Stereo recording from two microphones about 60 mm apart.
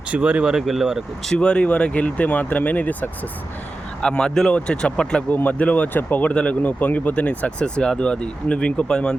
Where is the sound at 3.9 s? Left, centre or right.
Centre.